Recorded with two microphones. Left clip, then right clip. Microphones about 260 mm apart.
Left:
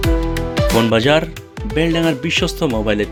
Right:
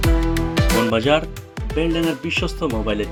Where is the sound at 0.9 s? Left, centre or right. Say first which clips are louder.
Left 4 dB; left.